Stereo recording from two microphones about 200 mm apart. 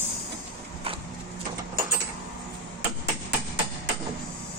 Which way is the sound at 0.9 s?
30° right (ahead or behind).